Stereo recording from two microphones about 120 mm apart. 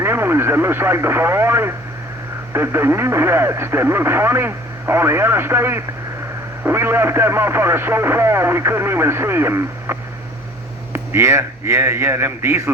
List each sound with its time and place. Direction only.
0.0 s radio: 20° right (ahead or behind)
2.5 s speech: 20° right (ahead or behind)